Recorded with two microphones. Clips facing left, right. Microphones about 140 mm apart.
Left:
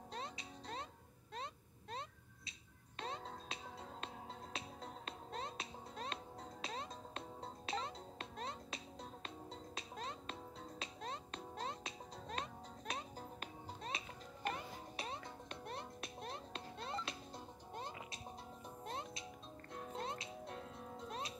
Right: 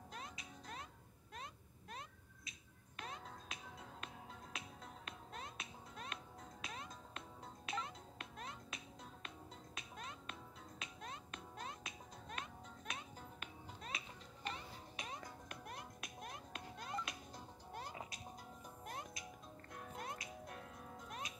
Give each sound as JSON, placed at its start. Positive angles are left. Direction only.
{"t": 0.1, "sound": "music", "side_deg": 30}
{"t": 1.3, "sound": "cat", "side_deg": 30}
{"t": 3.0, "sound": "music", "side_deg": 30}
{"t": 14.4, "sound": "music", "side_deg": 50}
{"t": 15.0, "sound": "music", "side_deg": 30}